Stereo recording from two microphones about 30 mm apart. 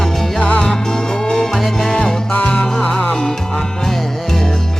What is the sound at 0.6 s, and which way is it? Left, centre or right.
Music, left.